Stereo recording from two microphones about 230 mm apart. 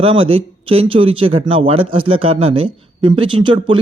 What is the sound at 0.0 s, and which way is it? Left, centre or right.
Speech, right.